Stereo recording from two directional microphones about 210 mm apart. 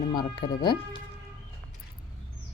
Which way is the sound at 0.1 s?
20° left (ahead or behind).